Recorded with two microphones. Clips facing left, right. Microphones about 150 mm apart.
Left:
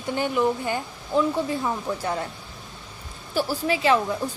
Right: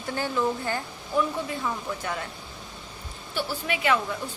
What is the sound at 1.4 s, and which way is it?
Speech, 30° left (ahead or behind).